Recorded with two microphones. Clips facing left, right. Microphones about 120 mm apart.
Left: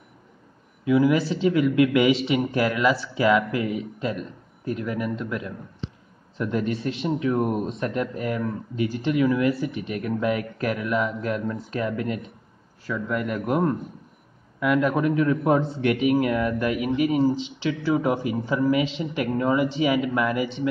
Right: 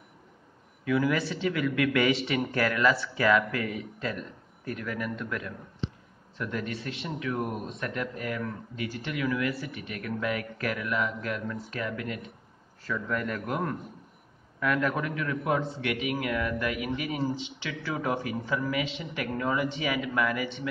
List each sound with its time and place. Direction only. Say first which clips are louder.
0.8 s speech: left 7 dB; 20° left (ahead or behind)
12.8 s a man's voice: left 4 dB; 10° left (ahead or behind)
13.5 s speech: left 10 dB; 25° left (ahead or behind)
14.6 s speech: left 6 dB; 15° left (ahead or behind)
17.8 s speech: left 7 dB; 15° left (ahead or behind)